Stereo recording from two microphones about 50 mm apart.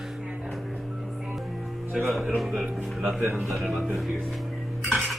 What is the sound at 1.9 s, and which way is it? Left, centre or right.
A man's voice, centre.